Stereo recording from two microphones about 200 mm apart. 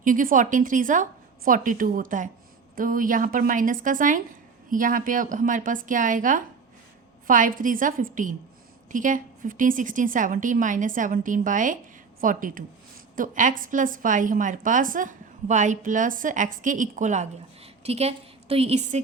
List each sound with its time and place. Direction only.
0.0 s a woman's voice: 40° right (ahead or behind)